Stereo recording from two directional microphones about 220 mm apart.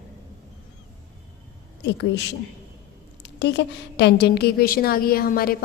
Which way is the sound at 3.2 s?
50° left (ahead or behind).